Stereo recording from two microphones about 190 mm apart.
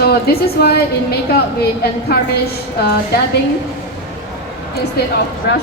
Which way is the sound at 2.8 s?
60° left (ahead or behind).